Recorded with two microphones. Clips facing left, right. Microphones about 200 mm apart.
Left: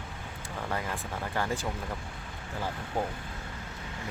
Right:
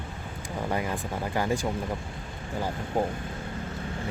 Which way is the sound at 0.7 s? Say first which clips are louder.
Right 4 dB; 15° right (ahead or behind).